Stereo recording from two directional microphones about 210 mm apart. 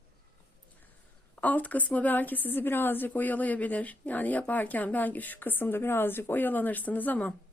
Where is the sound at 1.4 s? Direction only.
5° left (ahead or behind).